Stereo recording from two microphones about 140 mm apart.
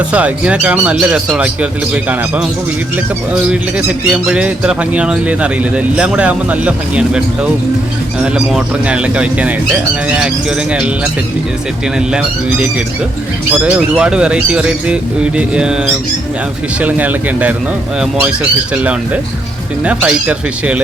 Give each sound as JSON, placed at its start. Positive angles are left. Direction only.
{"t": 0.1, "sound": "speech", "side_deg": -10}
{"t": 3.5, "sound": "speech", "side_deg": -5}
{"t": 11.9, "sound": "speech", "side_deg": -5}
{"t": 16.8, "sound": "speech", "side_deg": -10}